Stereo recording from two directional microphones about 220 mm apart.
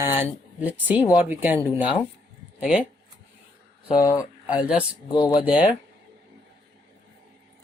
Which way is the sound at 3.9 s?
15° left (ahead or behind).